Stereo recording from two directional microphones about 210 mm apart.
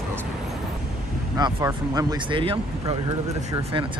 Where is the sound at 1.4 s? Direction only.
15° right (ahead or behind).